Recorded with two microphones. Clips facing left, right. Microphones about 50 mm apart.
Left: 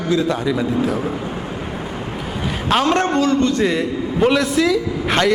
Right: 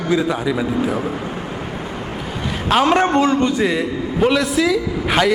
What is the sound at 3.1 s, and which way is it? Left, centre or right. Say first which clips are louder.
Speech: right 1 dB; right.